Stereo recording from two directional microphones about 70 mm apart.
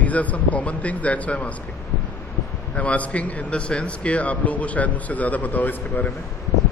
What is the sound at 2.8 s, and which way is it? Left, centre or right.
Speech, left.